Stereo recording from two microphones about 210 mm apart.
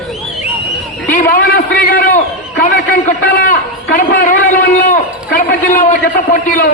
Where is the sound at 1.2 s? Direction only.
45° left (ahead or behind).